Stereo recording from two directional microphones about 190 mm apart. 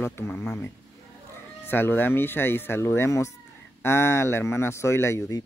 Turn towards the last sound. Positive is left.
turn(degrees=15)  # may be behind; listen again after turning